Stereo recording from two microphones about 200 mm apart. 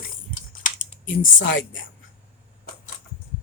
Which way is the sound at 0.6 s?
40° left (ahead or behind).